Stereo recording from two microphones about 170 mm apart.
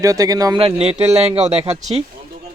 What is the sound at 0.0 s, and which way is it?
Speech, 20° right (ahead or behind).